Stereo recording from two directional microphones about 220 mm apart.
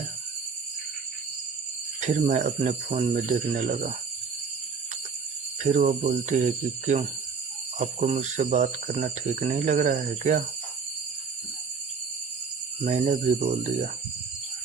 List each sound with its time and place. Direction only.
2.0 s speech: 30° right (ahead or behind)
5.6 s speech: 35° right (ahead or behind)
12.8 s speech: 35° right (ahead or behind)